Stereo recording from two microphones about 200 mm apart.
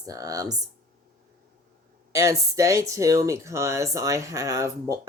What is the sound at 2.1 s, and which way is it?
Speech, 15° right (ahead or behind).